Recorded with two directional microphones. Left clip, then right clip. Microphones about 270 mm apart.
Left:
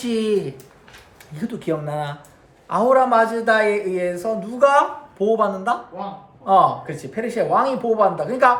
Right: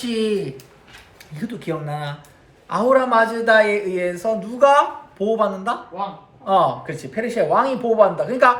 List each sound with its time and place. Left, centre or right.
0.0 s speech: centre
1.4 s speech: centre